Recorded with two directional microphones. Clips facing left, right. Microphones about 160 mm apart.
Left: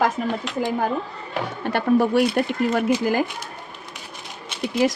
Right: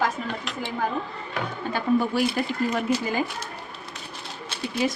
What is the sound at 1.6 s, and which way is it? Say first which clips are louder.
A woman's voice: left 4 dB; 75° left (ahead or behind).